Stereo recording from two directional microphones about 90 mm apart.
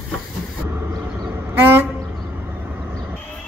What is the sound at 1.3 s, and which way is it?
Vehicle, 25° right (ahead or behind).